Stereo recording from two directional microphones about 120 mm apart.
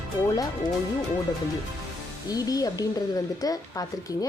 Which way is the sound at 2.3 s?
30° left (ahead or behind).